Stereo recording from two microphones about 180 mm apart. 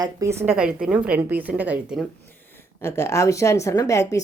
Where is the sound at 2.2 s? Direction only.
15° left (ahead or behind).